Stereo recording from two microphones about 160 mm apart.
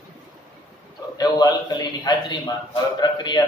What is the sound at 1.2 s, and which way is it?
A man's voice, 25° left (ahead or behind).